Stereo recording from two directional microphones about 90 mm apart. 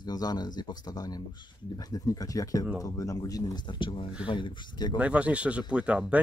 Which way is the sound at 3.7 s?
70° left (ahead or behind).